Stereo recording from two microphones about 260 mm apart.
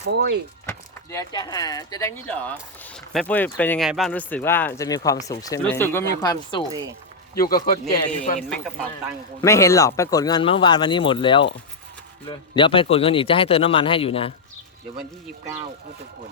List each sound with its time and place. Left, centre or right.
0.0 s speech: right
0.6 s speech: centre
7.3 s speech: left
8.4 s a man's voice: centre; by 14.3 s left